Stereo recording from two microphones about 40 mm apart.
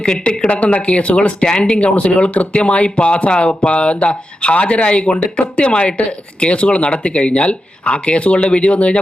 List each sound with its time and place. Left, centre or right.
0.0 s speech: centre
0.4 s speech: left